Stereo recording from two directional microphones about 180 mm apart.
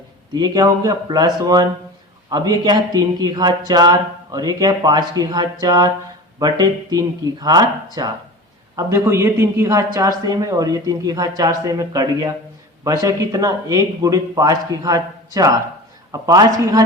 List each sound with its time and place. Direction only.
0.3 s a man's voice: 20° right (ahead or behind)